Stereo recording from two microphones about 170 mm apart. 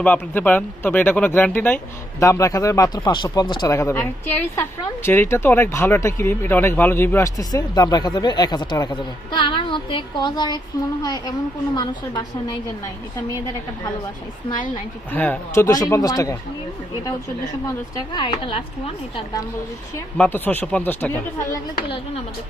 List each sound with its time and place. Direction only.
0.0 s speech: 10° left (ahead or behind); by 12.2 s 25° left (ahead or behind)
15.1 s speech: 10° left (ahead or behind)
17.9 s speech: 25° left (ahead or behind)
20.1 s speech: 10° left (ahead or behind)